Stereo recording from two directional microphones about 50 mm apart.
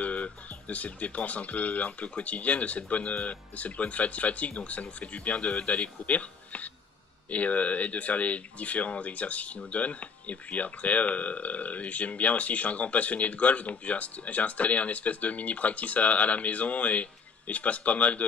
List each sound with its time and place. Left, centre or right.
0.0 s speech: left